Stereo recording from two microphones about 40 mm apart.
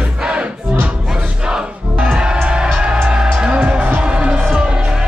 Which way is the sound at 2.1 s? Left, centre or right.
Right.